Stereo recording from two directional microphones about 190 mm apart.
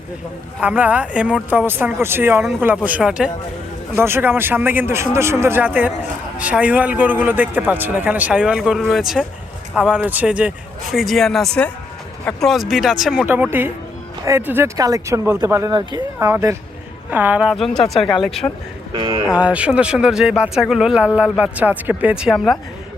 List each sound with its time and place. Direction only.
0.6 s a man's voice: 5° right (ahead or behind)